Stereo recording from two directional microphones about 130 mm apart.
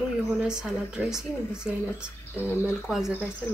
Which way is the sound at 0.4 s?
5° right (ahead or behind).